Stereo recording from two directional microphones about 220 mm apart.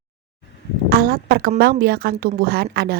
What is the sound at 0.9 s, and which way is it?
A woman's voice, 45° right (ahead or behind).